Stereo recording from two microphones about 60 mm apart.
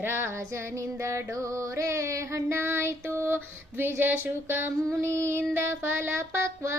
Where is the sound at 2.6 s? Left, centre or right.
Right.